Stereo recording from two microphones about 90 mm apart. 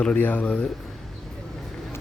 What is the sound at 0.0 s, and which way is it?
Speech, 15° left (ahead or behind).